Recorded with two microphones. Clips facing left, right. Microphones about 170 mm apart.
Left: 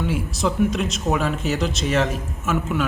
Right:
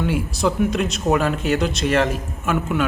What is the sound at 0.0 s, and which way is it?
A man's voice, centre (ahead or behind).